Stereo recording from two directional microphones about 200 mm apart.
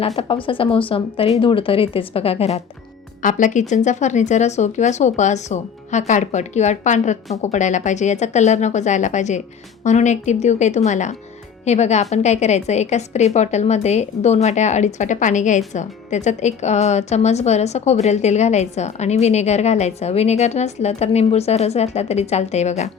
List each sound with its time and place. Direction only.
0.0 s a woman's voice: 25° left (ahead or behind)